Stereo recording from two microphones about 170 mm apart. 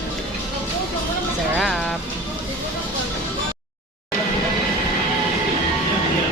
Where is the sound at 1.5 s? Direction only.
Centre (ahead or behind).